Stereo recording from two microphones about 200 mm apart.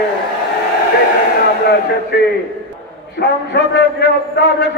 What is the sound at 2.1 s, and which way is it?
A man's voice, 55° left (ahead or behind).